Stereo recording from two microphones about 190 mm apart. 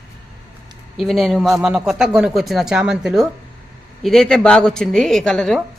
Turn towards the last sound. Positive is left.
turn(degrees=0)  # may be behind; listen again after turning